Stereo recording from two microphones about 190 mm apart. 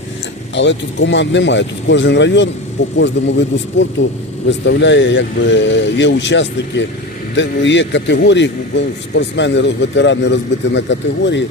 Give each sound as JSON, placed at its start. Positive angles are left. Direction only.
{"t": 0.5, "sound": "a man's voice", "side_deg": 70}